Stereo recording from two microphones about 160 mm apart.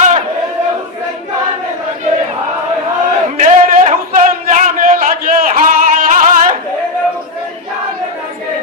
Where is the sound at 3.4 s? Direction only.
55° right (ahead or behind).